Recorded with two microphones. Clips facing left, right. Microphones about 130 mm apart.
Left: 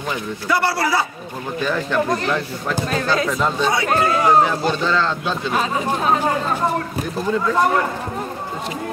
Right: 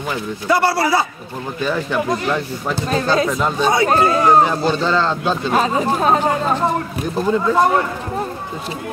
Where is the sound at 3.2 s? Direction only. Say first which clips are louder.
Right 1 dB; 10° right (ahead or behind).